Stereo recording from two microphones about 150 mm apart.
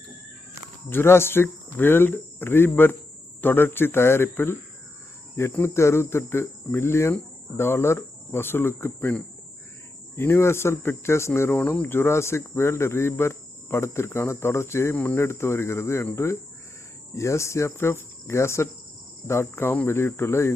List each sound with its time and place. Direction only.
0.9 s speech: 15° left (ahead or behind)
17.2 s cricket: 20° left (ahead or behind)
19.3 s speech: 15° left (ahead or behind)